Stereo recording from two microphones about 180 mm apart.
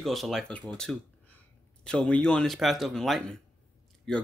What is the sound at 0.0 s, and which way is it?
Speech, centre (ahead or behind).